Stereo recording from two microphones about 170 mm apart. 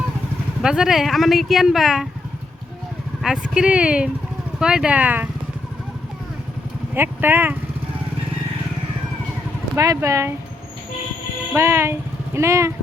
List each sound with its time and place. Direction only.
0.6 s speech: 5° right (ahead or behind)
3.2 s speech: 5° right (ahead or behind)
6.9 s speech: 10° right (ahead or behind)
9.7 s speech: 20° right (ahead or behind)
11.5 s speech: 15° right (ahead or behind)